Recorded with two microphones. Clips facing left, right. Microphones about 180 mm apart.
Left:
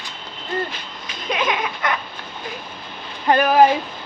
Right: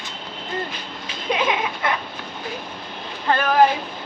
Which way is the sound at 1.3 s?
30° right (ahead or behind).